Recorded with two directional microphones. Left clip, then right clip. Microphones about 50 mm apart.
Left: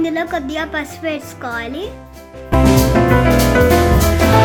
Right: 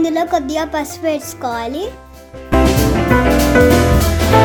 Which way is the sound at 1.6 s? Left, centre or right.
Right.